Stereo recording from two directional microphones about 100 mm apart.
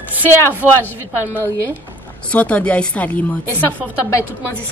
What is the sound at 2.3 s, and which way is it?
Speech, 15° left (ahead or behind).